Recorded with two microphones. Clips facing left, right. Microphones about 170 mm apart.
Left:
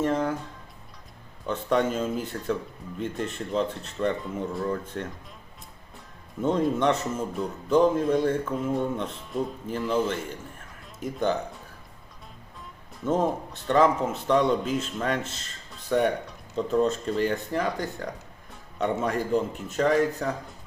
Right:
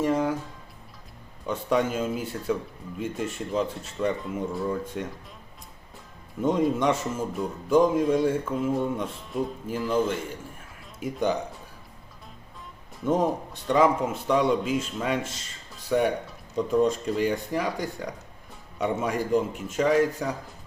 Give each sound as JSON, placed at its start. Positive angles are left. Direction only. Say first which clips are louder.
{"t": 0.0, "sound": "music", "louder": "right 1 dB", "side_deg": -10}
{"t": 1.5, "sound": "speech", "louder": "even", "side_deg": -10}
{"t": 6.4, "sound": "speech", "louder": "even", "side_deg": -10}
{"t": 13.1, "sound": "speech", "louder": "right 1 dB", "side_deg": -15}